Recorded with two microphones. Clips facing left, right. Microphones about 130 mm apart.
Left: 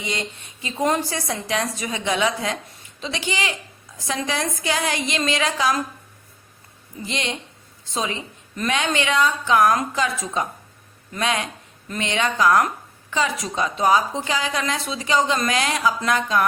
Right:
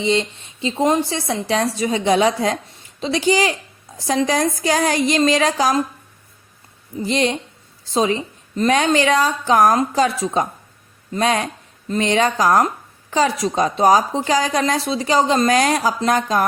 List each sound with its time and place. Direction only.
0.0 s a woman's voice: 25° right (ahead or behind)
7.0 s a woman's voice: 35° right (ahead or behind)